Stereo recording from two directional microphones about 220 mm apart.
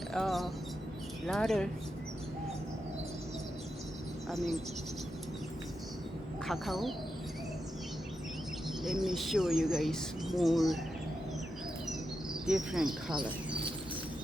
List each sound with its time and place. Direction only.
0.1 s a sound: centre (ahead or behind)
1.3 s speech: centre (ahead or behind)
4.3 s speech: centre (ahead or behind)
6.5 s speech: centre (ahead or behind)
8.8 s speech: centre (ahead or behind)
12.5 s speech: centre (ahead or behind)